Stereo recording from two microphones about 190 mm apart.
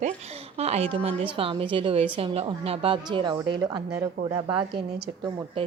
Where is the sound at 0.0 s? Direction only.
35° right (ahead or behind).